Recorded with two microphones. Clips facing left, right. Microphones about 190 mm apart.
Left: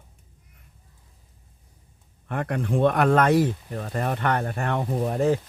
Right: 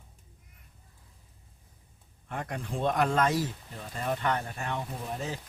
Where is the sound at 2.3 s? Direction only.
60° left (ahead or behind).